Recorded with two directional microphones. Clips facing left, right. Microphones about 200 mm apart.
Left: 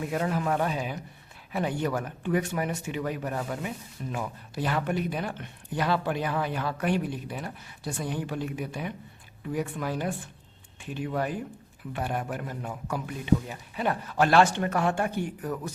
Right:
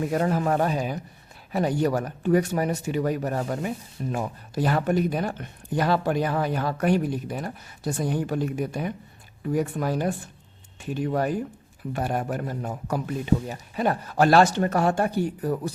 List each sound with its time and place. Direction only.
0.1 s a man's voice: 40° right (ahead or behind)